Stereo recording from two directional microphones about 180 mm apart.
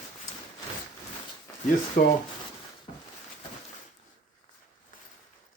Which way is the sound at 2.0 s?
50° left (ahead or behind).